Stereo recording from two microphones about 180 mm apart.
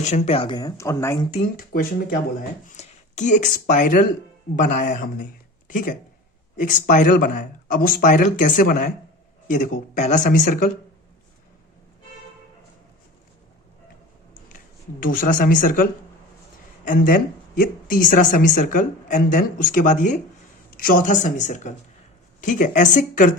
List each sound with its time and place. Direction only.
0.0 s speech: 40° left (ahead or behind); by 1.2 s 15° left (ahead or behind)
1.3 s speech: 45° left (ahead or behind)
15.0 s speech: 50° left (ahead or behind)